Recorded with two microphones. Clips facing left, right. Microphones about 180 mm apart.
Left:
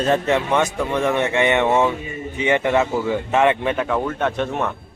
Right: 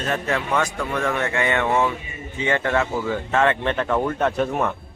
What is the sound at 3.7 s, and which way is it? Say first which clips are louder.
Speech: even; 5° left (ahead or behind).